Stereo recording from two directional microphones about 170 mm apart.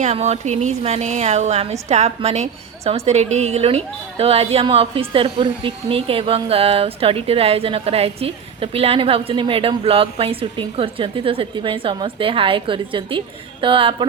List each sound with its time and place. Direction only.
0.0 s a woman's voice: 40° right (ahead or behind)